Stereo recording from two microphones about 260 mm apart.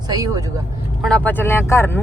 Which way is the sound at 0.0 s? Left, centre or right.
Centre.